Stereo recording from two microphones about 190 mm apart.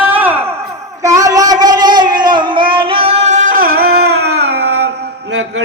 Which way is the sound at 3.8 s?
55° right (ahead or behind).